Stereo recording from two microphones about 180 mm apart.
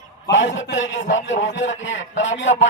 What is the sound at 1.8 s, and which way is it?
Speech, 90° left.